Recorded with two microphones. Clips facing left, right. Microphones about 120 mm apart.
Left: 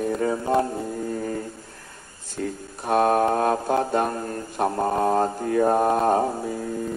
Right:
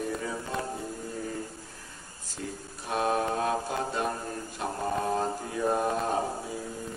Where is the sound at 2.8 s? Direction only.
55° left (ahead or behind).